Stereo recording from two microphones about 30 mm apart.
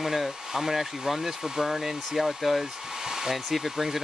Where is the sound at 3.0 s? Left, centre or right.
Centre.